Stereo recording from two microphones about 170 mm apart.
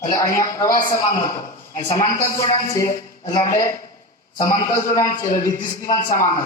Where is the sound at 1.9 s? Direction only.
20° left (ahead or behind).